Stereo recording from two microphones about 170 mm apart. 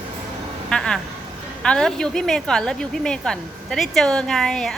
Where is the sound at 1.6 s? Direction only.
5° left (ahead or behind).